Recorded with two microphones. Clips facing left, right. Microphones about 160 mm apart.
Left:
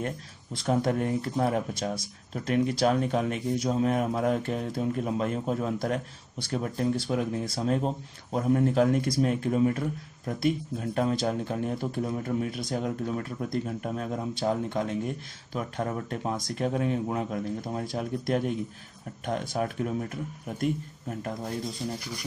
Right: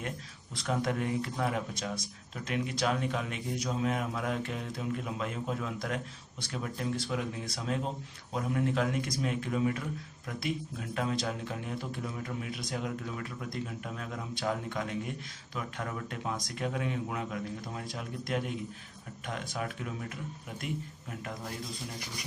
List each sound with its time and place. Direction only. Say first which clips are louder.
0.7 s speech: left 5 dB; 40° left (ahead or behind)